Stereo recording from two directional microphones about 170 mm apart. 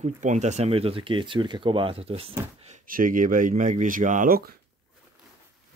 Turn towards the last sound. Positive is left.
turn(degrees=-60)  # may be behind; listen again after turning